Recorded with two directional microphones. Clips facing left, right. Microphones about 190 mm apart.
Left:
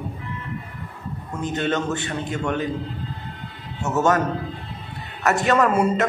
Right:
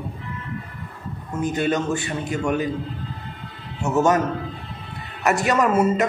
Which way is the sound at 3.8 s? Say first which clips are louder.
Right 1 dB; 10° right (ahead or behind).